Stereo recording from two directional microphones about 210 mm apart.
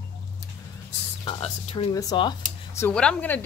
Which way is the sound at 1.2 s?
25° left (ahead or behind).